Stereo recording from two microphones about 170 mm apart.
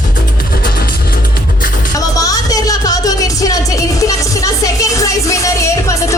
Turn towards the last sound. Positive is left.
turn(degrees=20)  # may be behind; listen again after turning